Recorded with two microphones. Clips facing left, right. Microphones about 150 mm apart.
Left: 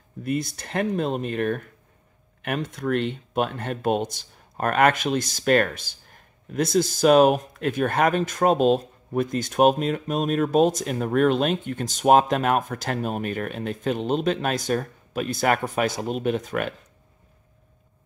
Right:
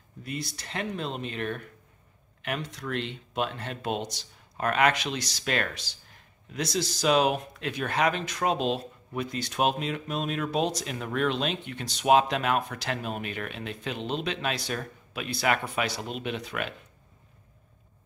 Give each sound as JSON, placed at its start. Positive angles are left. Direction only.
{"t": 0.2, "sound": "speech", "side_deg": 50}